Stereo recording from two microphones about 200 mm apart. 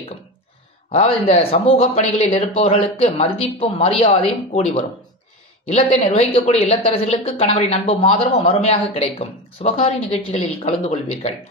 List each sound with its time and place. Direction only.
0.9 s a woman's voice: 30° left (ahead or behind)
6.1 s a woman's voice: 30° left (ahead or behind)